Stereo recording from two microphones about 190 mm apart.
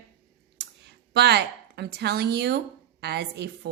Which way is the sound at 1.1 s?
60° right (ahead or behind).